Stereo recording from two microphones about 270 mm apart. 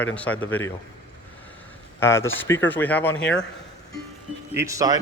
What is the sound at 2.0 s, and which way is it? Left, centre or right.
Speech, centre.